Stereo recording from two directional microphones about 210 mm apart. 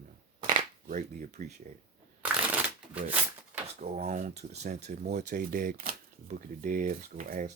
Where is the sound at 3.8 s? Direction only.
30° right (ahead or behind).